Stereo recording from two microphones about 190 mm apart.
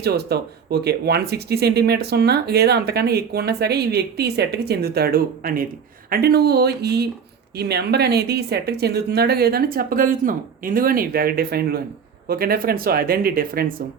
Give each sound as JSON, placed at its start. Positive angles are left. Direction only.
{"t": 0.0, "sound": "speech", "side_deg": -60}